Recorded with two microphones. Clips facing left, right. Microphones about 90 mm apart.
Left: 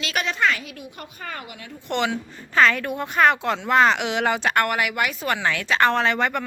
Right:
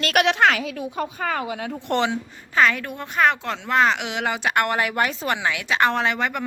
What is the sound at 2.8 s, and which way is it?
Speech, 5° left (ahead or behind).